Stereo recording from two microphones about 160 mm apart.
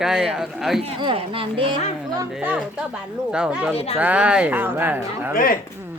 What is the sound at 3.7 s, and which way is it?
Speech, 40° left (ahead or behind).